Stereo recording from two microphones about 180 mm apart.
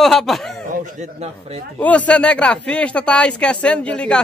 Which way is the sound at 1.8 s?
10° left (ahead or behind).